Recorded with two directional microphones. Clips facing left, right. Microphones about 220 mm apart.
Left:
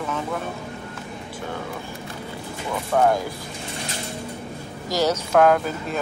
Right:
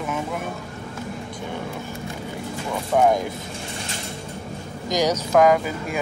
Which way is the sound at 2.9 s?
15° right (ahead or behind).